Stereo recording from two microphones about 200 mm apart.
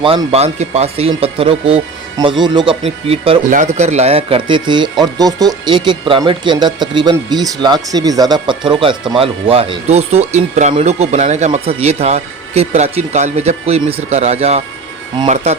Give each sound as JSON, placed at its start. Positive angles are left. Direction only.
{"t": 0.0, "sound": "speech", "side_deg": -30}